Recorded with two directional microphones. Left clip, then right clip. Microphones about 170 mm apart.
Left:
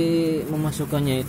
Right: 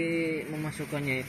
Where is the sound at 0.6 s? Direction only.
Centre (ahead or behind).